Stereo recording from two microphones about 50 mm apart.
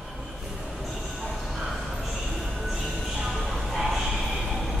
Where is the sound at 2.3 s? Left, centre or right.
Centre.